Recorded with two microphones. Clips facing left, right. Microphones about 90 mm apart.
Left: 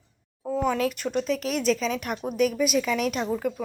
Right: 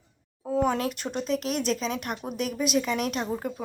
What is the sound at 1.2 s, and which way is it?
A woman's voice, 40° right (ahead or behind).